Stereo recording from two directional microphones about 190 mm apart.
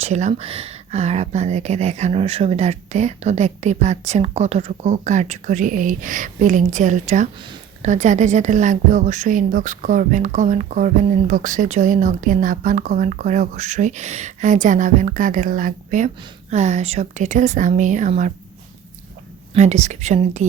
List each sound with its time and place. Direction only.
0.0 s a woman's voice: 35° right (ahead or behind)
19.5 s a woman's voice: 35° right (ahead or behind)